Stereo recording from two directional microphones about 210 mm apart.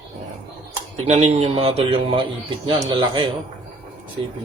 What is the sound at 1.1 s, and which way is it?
Speech, 30° right (ahead or behind).